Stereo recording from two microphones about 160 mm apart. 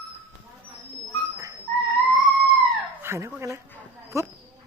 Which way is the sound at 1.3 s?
20° right (ahead or behind).